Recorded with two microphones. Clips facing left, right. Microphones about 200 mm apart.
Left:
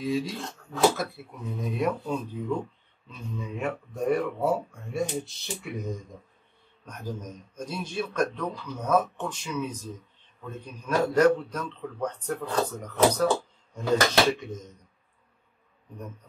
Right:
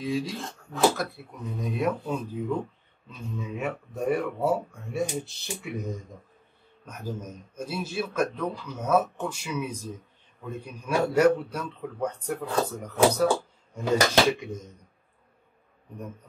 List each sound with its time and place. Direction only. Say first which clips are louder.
0.0 s speech: left 1 dB; centre (ahead or behind)
3.3 s speech: even; centre (ahead or behind)
6.9 s a man's voice: right 1 dB; 5° right (ahead or behind)